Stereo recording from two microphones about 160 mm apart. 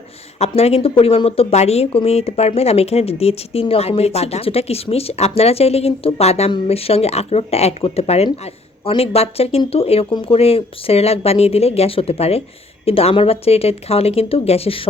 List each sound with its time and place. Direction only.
0.3 s speech: 40° left (ahead or behind)